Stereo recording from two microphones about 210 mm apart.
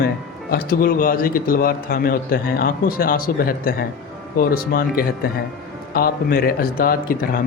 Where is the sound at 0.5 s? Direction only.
45° left (ahead or behind).